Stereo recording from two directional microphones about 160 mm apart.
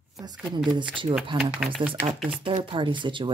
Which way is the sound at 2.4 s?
30° right (ahead or behind).